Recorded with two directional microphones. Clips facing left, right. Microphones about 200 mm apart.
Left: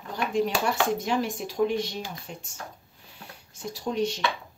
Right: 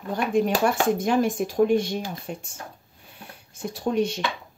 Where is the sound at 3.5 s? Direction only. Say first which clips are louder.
Right 5 dB; 55° right (ahead or behind).